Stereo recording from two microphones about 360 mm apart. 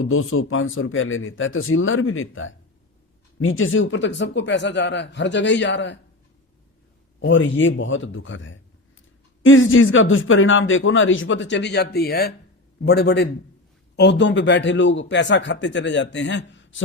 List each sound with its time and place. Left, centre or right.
0.0 s a man's voice: left
7.2 s a man's voice: left